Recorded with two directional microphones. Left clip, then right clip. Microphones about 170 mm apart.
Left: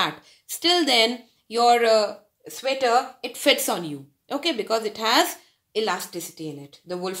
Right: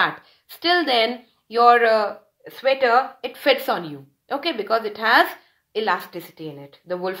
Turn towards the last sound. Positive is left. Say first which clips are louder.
# right 4 dB
turn(degrees=35)  # may be behind; listen again after turning